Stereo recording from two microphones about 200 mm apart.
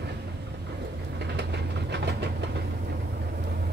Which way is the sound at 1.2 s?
60° right (ahead or behind).